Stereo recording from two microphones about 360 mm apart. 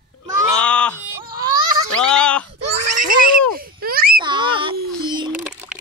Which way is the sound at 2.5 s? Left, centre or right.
Right.